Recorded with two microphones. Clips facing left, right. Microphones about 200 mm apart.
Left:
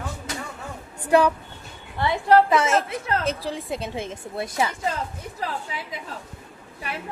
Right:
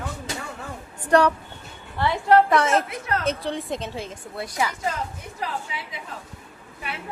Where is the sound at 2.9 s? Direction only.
30° left (ahead or behind).